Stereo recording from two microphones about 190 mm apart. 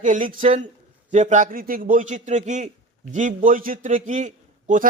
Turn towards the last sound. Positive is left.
turn(degrees=-40)  # may be behind; listen again after turning